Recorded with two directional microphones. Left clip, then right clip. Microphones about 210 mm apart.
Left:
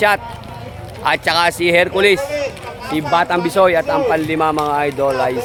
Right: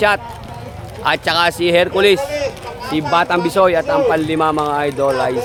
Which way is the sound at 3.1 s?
10° right (ahead or behind).